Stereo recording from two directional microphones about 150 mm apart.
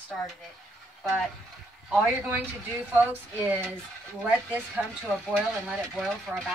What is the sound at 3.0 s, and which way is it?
Speech, 15° right (ahead or behind).